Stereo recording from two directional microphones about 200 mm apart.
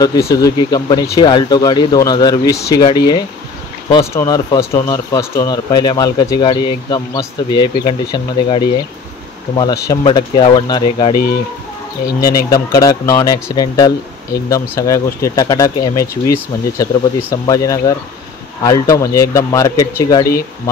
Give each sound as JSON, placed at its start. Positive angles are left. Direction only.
{"t": 0.0, "sound": "speech", "side_deg": 15}
{"t": 12.4, "sound": "speech", "side_deg": 20}